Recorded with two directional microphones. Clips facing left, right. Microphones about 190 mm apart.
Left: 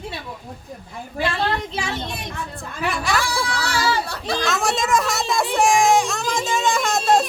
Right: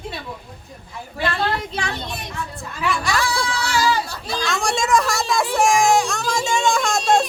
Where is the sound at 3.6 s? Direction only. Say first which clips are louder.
Right 3 dB; 65° left (ahead or behind).